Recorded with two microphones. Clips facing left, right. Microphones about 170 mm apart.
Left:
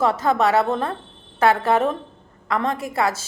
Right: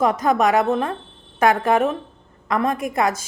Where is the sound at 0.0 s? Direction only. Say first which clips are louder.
Right 1 dB; 15° right (ahead or behind).